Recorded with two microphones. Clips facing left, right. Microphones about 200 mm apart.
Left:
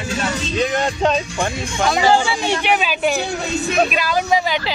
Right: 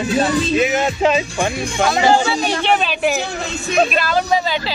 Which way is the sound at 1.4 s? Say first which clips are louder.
Right 2 dB; 25° right (ahead or behind).